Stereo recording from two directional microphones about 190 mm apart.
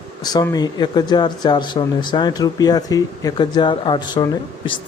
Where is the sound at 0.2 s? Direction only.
20° left (ahead or behind).